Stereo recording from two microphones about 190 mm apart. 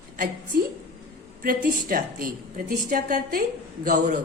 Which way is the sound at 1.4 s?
45° right (ahead or behind).